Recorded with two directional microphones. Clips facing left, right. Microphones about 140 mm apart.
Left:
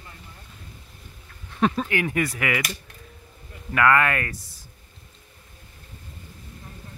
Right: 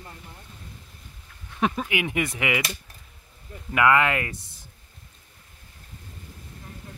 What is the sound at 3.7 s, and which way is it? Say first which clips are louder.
Speech: even; 20° right (ahead or behind).